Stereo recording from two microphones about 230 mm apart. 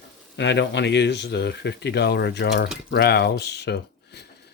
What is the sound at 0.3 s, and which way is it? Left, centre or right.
Speech, left.